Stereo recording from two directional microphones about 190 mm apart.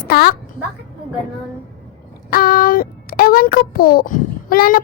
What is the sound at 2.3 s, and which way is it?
A child's voice, 50° left (ahead or behind).